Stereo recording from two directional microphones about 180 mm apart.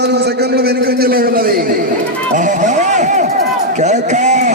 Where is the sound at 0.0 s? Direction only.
65° right (ahead or behind); by 1.9 s 50° right (ahead or behind).